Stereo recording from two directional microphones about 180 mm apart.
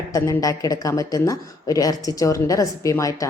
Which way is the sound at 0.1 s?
20° left (ahead or behind).